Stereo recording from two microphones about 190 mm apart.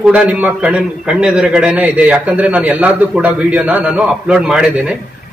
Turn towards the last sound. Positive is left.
turn(degrees=-5)  # may be behind; listen again after turning